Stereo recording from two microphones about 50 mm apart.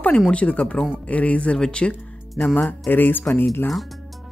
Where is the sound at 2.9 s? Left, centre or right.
Left.